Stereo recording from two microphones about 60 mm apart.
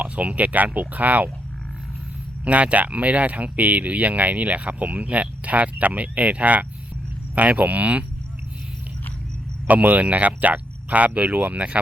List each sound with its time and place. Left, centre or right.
0.0 s speech: right
2.4 s speech: right
9.6 s speech: right